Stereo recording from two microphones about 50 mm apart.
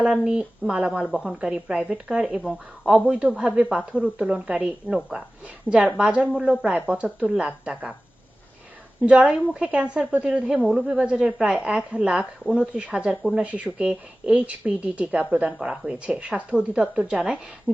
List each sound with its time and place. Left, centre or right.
0.1 s speech: centre
5.6 s speech: right
6.9 s speech: right
9.0 s speech: right